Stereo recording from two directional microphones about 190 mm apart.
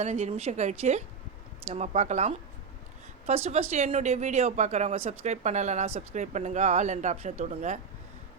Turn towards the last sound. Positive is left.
turn(degrees=-40)  # may be behind; listen again after turning